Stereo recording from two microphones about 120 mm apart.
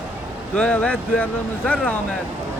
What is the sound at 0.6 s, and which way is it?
Speech, 10° left (ahead or behind).